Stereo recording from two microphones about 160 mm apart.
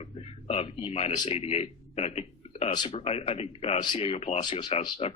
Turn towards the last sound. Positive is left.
turn(degrees=35)  # may be behind; listen again after turning